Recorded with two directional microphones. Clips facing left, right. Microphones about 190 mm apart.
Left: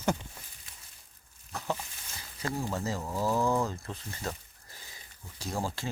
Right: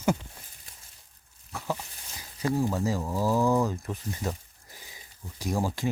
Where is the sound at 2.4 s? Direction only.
15° right (ahead or behind).